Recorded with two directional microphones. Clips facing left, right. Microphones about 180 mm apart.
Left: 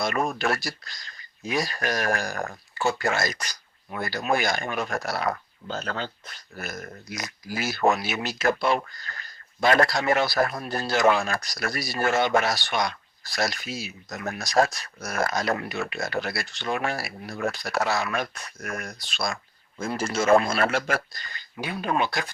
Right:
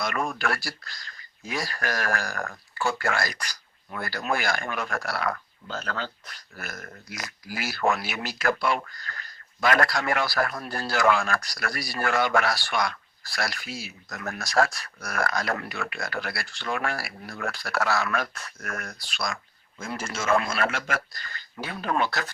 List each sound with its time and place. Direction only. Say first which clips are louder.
0.0 s speech: left 3 dB; 25° left (ahead or behind)
21.1 s speech: even; 20° left (ahead or behind)